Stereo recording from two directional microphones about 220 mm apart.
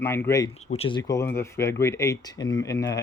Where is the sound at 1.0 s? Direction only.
15° left (ahead or behind).